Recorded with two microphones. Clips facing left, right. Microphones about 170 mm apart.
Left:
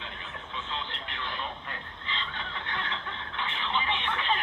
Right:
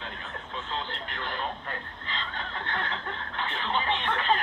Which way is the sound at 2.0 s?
40° right (ahead or behind).